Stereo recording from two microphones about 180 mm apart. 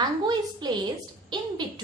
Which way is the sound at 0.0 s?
25° right (ahead or behind).